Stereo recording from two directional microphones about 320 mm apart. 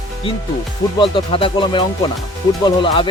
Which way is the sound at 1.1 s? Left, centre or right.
Centre.